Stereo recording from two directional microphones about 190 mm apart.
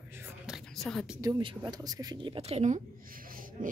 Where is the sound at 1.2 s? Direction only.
25° right (ahead or behind).